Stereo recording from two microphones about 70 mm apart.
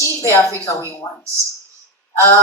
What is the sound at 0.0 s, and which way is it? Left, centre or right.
Speech, left.